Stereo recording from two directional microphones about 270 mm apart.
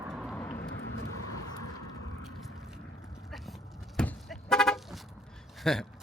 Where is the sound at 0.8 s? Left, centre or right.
Left.